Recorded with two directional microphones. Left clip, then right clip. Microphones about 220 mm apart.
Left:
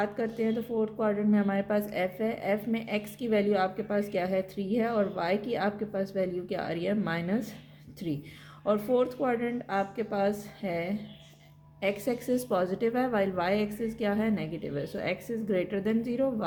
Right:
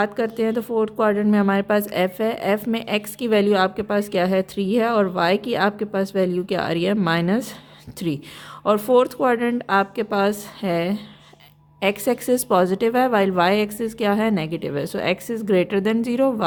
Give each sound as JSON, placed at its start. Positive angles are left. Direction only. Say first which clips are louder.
{"t": 0.0, "sound": "speech", "louder": "right 9 dB", "side_deg": -40}